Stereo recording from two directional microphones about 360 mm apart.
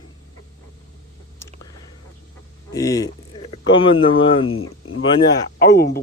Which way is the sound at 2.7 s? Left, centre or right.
Centre.